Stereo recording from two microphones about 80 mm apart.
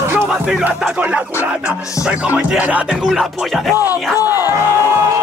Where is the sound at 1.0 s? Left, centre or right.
Centre.